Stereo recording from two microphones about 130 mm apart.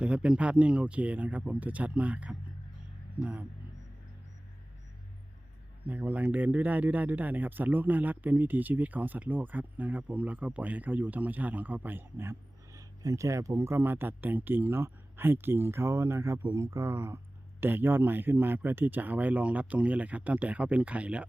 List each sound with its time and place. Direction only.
0.0 s speech: 10° right (ahead or behind)
5.8 s speech: 10° right (ahead or behind)